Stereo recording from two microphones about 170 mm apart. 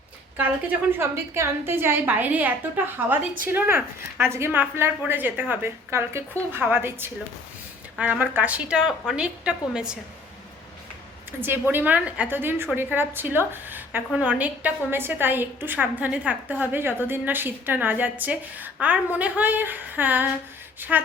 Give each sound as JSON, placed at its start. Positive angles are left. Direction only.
{"t": 0.3, "sound": "a woman's voice", "side_deg": -10}
{"t": 11.3, "sound": "a woman's voice", "side_deg": -10}